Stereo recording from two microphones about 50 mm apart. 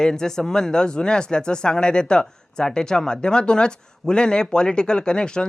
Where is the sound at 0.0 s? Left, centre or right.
Centre.